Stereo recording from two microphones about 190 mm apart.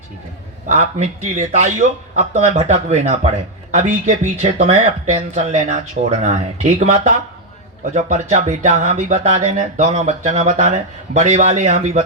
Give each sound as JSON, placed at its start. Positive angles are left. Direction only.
{"t": 0.7, "sound": "speech", "side_deg": -35}